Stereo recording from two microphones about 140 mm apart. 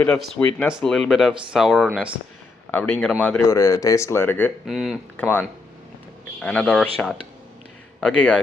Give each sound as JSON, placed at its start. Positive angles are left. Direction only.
{"t": 0.4, "sound": "speech", "side_deg": 15}
{"t": 0.7, "sound": "speech", "side_deg": 0}
{"t": 3.5, "sound": "speech", "side_deg": 20}
{"t": 4.6, "sound": "speech", "side_deg": 0}
{"t": 5.1, "sound": "speech", "side_deg": 10}